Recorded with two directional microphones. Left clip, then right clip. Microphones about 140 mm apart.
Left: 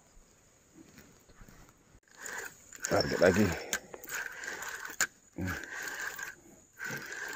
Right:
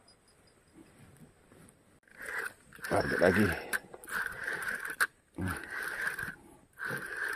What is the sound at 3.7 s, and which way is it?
Mechanisms, 15° left (ahead or behind).